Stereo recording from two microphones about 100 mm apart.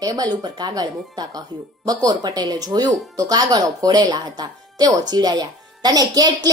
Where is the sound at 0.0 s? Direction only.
40° right (ahead or behind).